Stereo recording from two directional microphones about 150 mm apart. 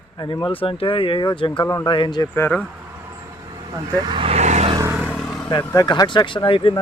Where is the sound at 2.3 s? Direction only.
10° left (ahead or behind).